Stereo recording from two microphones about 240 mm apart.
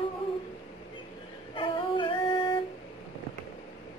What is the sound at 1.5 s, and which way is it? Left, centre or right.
Music, centre.